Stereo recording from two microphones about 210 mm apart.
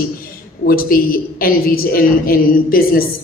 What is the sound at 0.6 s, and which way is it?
A woman's voice, 45° left (ahead or behind).